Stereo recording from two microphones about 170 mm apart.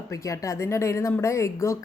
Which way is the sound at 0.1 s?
20° left (ahead or behind).